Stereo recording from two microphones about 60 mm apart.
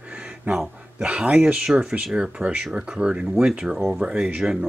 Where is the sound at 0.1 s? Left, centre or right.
Centre.